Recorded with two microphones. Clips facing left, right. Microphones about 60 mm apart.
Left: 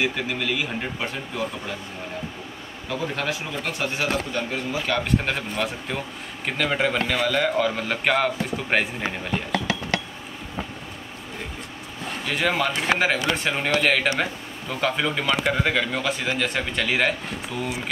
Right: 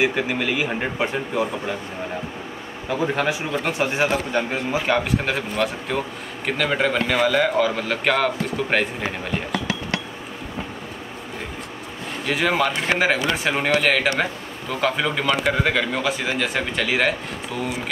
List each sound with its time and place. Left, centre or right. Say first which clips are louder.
0.0 s a man's voice: right 4 dB; centre
2.9 s a man's voice: right 5 dB; centre
5.0 s speech: right 1 dB; centre
12.3 s speech: right 3 dB; centre